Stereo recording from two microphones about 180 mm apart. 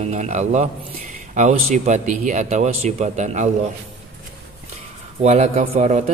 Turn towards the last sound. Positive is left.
turn(degrees=-40)  # may be behind; listen again after turning